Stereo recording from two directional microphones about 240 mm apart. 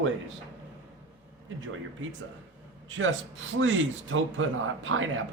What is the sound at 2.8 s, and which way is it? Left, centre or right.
A man's voice, right.